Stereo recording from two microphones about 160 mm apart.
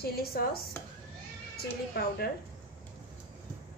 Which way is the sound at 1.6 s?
75° left (ahead or behind).